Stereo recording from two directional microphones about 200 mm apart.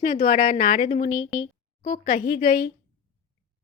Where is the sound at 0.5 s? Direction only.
45° left (ahead or behind).